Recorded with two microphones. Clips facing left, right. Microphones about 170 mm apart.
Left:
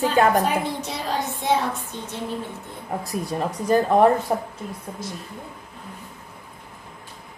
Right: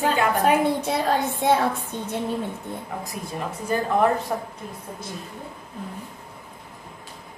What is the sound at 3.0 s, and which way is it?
Speech, 35° left (ahead or behind).